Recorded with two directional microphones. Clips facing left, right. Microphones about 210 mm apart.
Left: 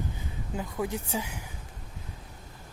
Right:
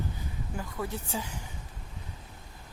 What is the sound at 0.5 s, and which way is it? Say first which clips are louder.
Speech: left 4 dB; 15° left (ahead or behind).